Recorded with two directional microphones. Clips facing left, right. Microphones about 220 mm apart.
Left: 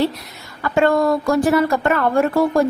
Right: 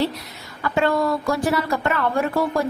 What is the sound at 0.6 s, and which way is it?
A woman's voice, 45° left (ahead or behind).